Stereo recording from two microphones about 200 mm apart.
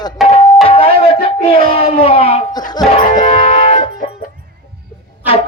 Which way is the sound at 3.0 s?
40° left (ahead or behind).